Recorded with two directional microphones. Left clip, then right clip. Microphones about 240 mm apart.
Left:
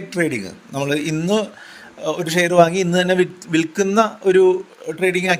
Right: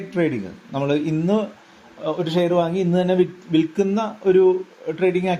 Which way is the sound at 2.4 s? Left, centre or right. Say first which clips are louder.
Left 10 dB; left.